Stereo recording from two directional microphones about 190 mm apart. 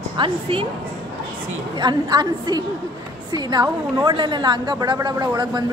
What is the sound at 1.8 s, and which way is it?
A woman's voice, 20° right (ahead or behind).